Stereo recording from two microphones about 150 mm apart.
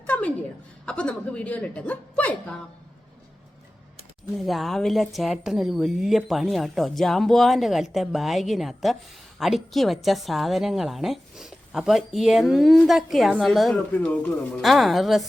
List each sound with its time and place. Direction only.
0.1 s a woman's voice: 10° left (ahead or behind)
4.4 s a woman's voice: centre (ahead or behind)